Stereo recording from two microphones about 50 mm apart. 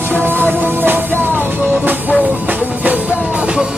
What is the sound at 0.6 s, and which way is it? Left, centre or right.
Music, right.